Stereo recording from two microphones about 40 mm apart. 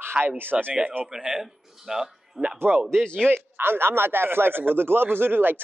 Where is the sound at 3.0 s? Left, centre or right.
Left.